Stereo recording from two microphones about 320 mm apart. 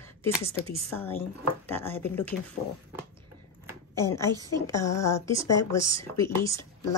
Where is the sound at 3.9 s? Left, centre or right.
Centre.